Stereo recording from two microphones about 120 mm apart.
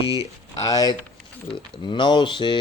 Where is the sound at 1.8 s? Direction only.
40° left (ahead or behind).